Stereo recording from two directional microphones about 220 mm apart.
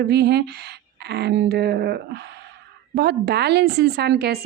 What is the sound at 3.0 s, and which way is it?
Speech, 45° right (ahead or behind).